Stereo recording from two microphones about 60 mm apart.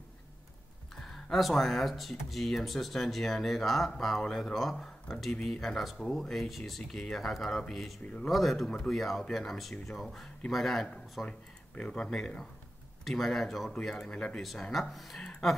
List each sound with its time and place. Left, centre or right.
0.9 s speech: centre
8.0 s speech: left
8.3 s speech: centre
11.2 s speech: centre
14.4 s speech: centre